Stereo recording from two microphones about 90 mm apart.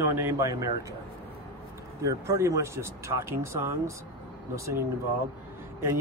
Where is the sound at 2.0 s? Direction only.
35° right (ahead or behind).